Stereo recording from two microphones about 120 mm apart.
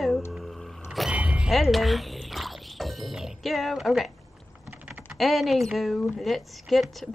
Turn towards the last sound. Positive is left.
turn(degrees=0)  # may be behind; listen again after turning